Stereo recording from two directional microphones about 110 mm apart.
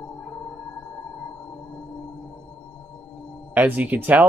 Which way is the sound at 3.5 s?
15° right (ahead or behind).